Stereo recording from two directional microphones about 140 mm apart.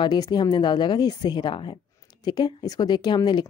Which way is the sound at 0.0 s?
30° left (ahead or behind).